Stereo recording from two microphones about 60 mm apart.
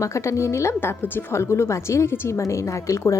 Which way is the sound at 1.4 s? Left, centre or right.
Left.